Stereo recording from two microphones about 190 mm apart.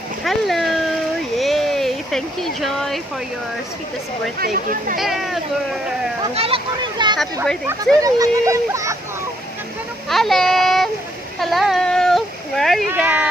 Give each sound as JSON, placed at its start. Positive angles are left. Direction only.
{"t": 0.3, "sound": "a sound", "side_deg": 0}
{"t": 4.4, "sound": "speech", "side_deg": -50}
{"t": 4.9, "sound": "speech", "side_deg": 0}
{"t": 6.3, "sound": "speech", "side_deg": -30}
{"t": 10.1, "sound": "speech", "side_deg": 0}
{"t": 11.3, "sound": "a sound", "side_deg": 0}
{"t": 12.9, "sound": "speech", "side_deg": -10}